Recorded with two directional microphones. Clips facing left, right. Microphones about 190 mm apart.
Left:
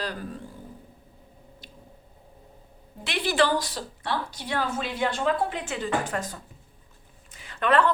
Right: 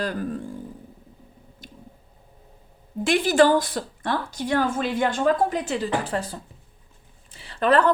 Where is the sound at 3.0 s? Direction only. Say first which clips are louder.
Right 6 dB; 45° right (ahead or behind).